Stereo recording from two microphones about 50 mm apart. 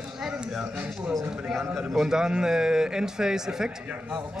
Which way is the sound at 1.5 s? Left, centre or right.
Centre.